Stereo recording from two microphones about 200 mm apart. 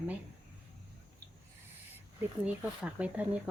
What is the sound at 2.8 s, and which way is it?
Speech, 5° right (ahead or behind).